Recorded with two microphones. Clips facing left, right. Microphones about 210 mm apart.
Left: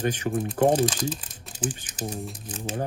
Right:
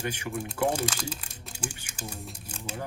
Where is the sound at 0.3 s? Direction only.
50° left (ahead or behind).